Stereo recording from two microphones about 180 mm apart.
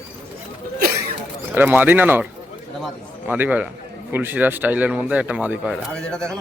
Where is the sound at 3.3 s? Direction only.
10° right (ahead or behind).